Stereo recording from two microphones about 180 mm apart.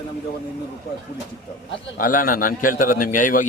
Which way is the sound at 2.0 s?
50° left (ahead or behind).